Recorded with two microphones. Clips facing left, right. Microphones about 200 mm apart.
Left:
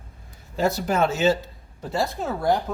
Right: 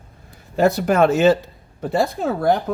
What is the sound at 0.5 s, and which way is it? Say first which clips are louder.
Speech: right 6 dB; 55° right (ahead or behind).